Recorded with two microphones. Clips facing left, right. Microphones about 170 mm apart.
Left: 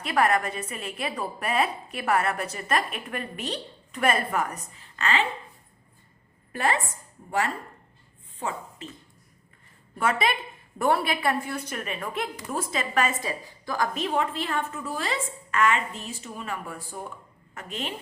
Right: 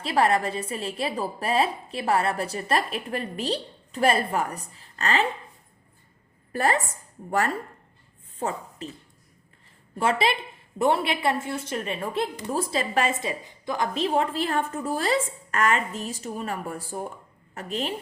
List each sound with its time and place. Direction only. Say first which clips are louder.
0.0 s a woman's voice: right 1 dB; 30° right (ahead or behind)
6.5 s a woman's voice: right 2 dB; 40° right (ahead or behind)
10.0 s a woman's voice: right 2 dB; 30° right (ahead or behind)